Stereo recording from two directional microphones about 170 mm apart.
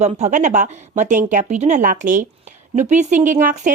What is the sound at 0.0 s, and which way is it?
Speech, 45° right (ahead or behind).